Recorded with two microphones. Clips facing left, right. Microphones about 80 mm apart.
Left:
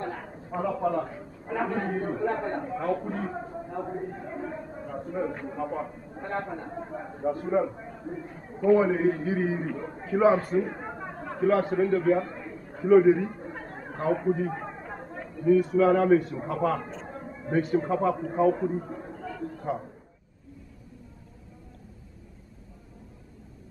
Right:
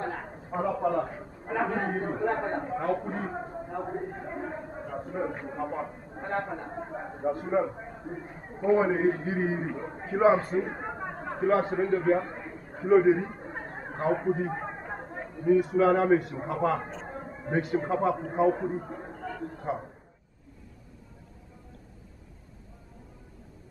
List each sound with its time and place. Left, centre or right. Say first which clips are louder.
0.5 s a man's voice: even; right
10.4 s chatter: left 2 dB; right
16.2 s a man's voice: left 2 dB; right
17.1 s a sound: left 2 dB; right
17.8 s a man's voice: left 1 dB; right
18.8 s speech: left 2 dB; centre
19.1 s a sound: even; centre
19.4 s speech: left 2 dB; right